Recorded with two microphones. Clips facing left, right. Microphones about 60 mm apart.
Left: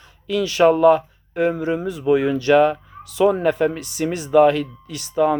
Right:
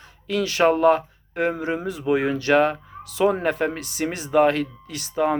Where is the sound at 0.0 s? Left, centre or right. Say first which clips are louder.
Left 2 dB; right.